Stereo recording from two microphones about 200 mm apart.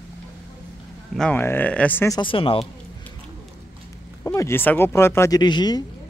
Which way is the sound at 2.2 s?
25° left (ahead or behind).